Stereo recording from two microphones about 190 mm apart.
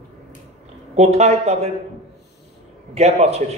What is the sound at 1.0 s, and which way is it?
Speech, 35° right (ahead or behind).